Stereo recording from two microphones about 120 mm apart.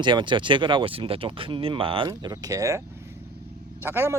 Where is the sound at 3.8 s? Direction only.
20° right (ahead or behind).